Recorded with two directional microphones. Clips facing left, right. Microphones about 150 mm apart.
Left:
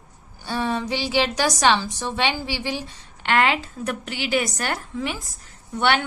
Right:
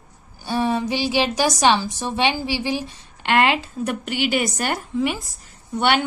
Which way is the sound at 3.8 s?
Centre (ahead or behind).